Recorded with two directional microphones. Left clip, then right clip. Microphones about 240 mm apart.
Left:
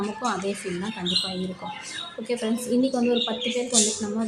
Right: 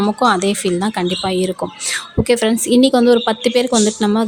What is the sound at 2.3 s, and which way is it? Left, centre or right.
A woman's voice, right.